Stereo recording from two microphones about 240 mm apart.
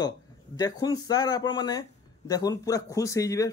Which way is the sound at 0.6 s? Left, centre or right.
Centre.